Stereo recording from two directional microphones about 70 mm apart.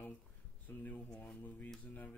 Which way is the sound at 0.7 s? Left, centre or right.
Left.